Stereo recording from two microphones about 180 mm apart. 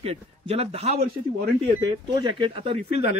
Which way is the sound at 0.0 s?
35° right (ahead or behind).